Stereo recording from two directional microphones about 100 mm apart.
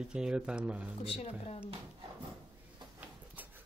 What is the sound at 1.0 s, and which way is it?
Speech, 80° left.